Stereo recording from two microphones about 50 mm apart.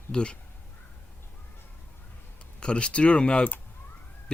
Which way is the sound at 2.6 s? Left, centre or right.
Left.